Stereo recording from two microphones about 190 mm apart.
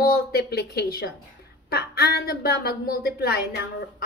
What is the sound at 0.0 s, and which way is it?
A woman's voice, 55° left (ahead or behind).